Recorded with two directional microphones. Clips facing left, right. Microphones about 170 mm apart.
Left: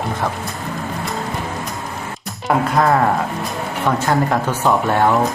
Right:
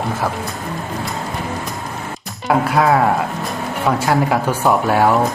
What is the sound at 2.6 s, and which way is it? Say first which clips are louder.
Speech: right 1 dB; 5° right (ahead or behind).